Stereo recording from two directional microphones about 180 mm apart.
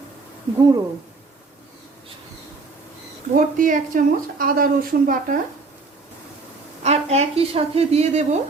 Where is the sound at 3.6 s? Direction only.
50° right (ahead or behind).